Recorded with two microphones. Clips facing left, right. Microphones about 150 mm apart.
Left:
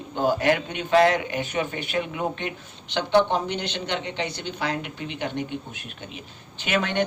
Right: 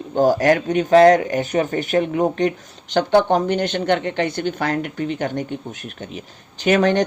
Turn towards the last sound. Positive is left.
turn(degrees=-40)  # may be behind; listen again after turning